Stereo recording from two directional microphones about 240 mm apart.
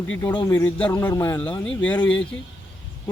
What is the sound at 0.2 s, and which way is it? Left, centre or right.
Speech, centre.